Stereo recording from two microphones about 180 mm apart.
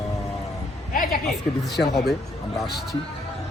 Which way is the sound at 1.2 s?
Centre (ahead or behind).